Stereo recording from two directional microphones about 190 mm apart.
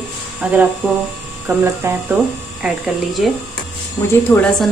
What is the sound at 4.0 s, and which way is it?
Speech, 20° left (ahead or behind).